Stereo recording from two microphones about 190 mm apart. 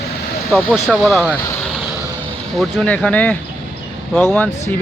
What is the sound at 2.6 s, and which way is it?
Speech, 5° left (ahead or behind).